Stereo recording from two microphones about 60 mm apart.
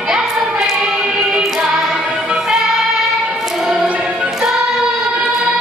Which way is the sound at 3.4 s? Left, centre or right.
Centre.